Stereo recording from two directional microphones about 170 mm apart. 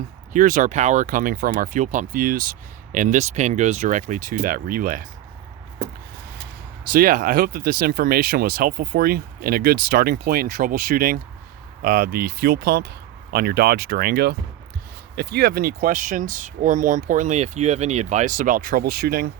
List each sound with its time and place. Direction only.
0.3 s speech: 45° right (ahead or behind)
6.9 s speech: 55° right (ahead or behind)